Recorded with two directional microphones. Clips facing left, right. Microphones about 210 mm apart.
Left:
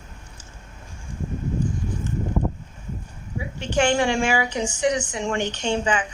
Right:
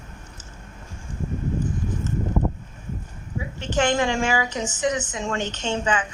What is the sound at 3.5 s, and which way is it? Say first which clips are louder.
A woman's voice: left 1 dB; 10° left (ahead or behind).